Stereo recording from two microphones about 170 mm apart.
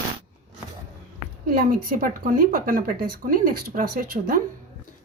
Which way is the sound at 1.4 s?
60° right (ahead or behind).